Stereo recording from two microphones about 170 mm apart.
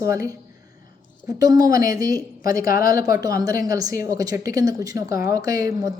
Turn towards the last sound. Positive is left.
turn(degrees=-20)  # may be behind; listen again after turning